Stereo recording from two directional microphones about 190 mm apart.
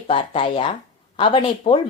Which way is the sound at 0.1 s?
25° left (ahead or behind).